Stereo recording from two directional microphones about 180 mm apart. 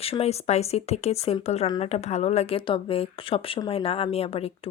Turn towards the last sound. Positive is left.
turn(degrees=35)  # may be behind; listen again after turning